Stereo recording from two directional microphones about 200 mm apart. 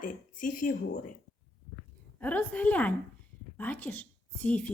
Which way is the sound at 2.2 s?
10° left (ahead or behind).